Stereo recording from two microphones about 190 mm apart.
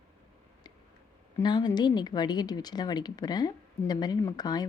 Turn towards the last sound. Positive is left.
turn(degrees=20)  # may be behind; listen again after turning